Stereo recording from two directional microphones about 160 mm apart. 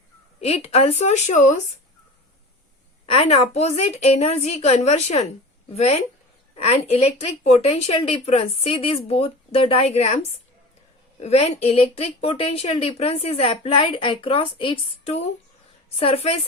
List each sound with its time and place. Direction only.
0.3 s a woman's voice: 40° left (ahead or behind)
3.1 s speech: 40° left (ahead or behind)
11.2 s speech: 40° left (ahead or behind)